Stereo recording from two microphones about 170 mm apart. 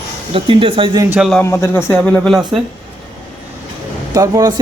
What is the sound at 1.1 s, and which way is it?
Speech, 5° right (ahead or behind).